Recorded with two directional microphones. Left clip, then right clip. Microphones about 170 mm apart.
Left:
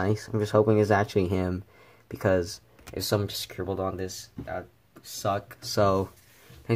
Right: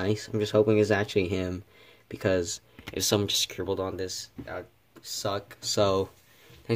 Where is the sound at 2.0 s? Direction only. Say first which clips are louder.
Left 2 dB; 25° right (ahead or behind).